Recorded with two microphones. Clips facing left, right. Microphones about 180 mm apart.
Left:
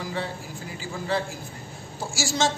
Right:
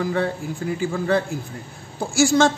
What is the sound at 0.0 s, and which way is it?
A man's voice, 55° right (ahead or behind).